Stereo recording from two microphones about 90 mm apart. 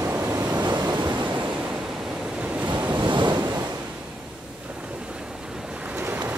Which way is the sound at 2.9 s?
60° right (ahead or behind).